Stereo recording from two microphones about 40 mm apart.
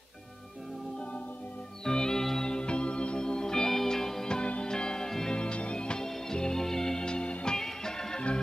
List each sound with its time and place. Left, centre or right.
1.9 s organ: centre
4.6 s music: centre
5.4 s music: left
7.5 s music: centre